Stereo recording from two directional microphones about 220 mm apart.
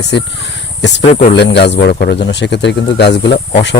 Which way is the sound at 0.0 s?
50° left (ahead or behind).